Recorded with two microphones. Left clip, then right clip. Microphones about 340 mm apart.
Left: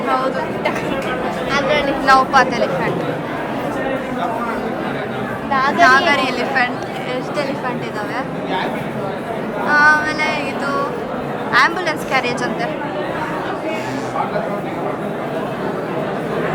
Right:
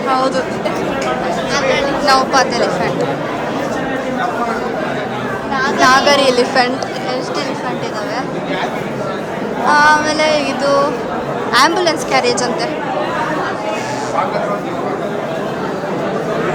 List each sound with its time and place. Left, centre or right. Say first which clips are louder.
1.5 s a sound: right 1 dB; left
2.0 s a woman's voice: left 1 dB; centre
5.5 s chatter: left 1 dB; left
6.1 s music: right 5 dB; centre
9.6 s music: right 2 dB; centre
11.5 s a woman's voice: right 3 dB; centre